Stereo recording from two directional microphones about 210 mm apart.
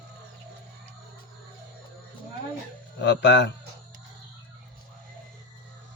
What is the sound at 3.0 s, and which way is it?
Speech, 55° left (ahead or behind).